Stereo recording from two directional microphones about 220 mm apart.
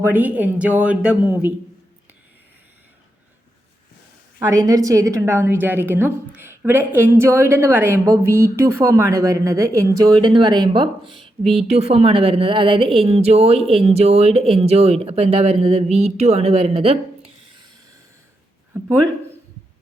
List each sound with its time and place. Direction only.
0.0 s a woman's voice: 10° right (ahead or behind)
4.4 s a woman's voice: 15° right (ahead or behind)